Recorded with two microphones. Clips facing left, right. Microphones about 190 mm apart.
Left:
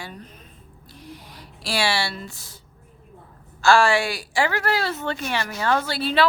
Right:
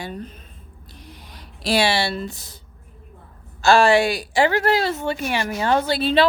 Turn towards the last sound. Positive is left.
turn(degrees=-20)  # may be behind; listen again after turning